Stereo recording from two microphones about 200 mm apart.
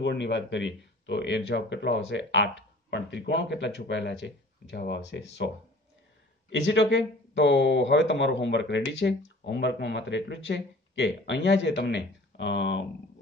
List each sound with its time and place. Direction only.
0.0 s speech: 60° left (ahead or behind)
6.5 s speech: 60° left (ahead or behind)